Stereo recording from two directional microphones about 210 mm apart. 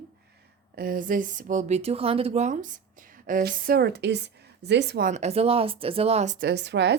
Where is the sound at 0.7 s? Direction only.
45° right (ahead or behind).